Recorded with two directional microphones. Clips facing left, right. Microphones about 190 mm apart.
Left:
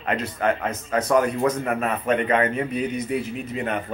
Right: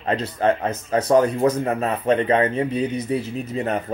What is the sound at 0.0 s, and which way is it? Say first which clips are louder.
A man's voice: right 3 dB; 30° right (ahead or behind).